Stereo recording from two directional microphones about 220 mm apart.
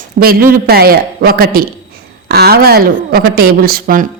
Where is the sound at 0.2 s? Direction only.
40° right (ahead or behind).